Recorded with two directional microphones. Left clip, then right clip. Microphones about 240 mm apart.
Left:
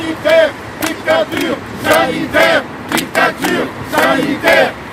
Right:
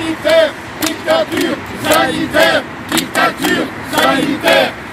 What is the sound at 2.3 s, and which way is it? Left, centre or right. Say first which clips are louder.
Vehicle: left 1 dB; centre.